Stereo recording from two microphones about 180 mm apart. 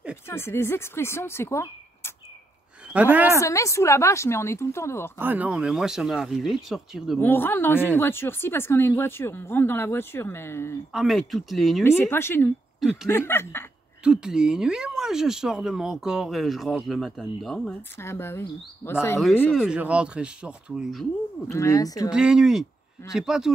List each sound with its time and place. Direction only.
0.3 s speech: 15° left (ahead or behind)
2.9 s a woman's voice: 10° right (ahead or behind)
3.3 s speech: 15° left (ahead or behind)
5.2 s speech: 10° right (ahead or behind)
7.2 s speech: 10° left (ahead or behind)
10.9 s speech: centre (ahead or behind)
12.0 s speech: 15° left (ahead or behind)
14.0 s speech: 5° right (ahead or behind); by 19.1 s 15° left (ahead or behind)
19.5 s speech: 5° right (ahead or behind)
21.5 s speech: 20° left (ahead or behind)
22.1 s speech: 5° right (ahead or behind)